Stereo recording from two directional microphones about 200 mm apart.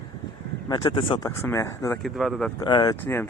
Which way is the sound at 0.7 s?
20° left (ahead or behind).